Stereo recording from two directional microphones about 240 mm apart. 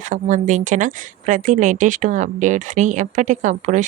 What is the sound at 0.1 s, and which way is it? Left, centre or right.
A woman's voice, right.